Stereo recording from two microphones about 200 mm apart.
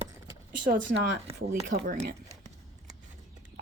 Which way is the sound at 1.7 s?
50° right (ahead or behind).